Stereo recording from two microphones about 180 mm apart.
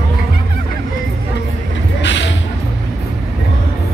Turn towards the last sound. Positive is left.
turn(degrees=90)